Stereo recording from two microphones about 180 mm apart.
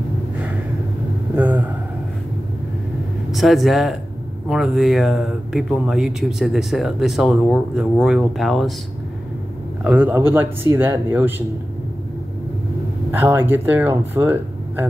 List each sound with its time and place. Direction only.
1.3 s vehicle: 10° right (ahead or behind)
3.3 s speech: centre (ahead or behind)
9.8 s speech: 10° right (ahead or behind)
13.1 s speech: 10° right (ahead or behind)